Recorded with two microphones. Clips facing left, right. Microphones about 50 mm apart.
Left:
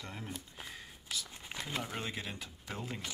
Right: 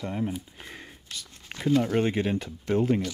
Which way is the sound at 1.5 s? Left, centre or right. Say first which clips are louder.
Right 4 dB; right.